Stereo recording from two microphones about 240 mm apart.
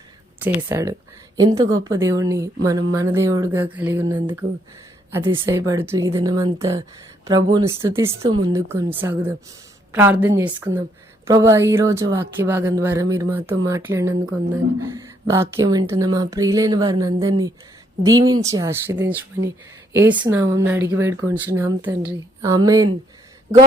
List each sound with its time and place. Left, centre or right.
0.3 s speech: centre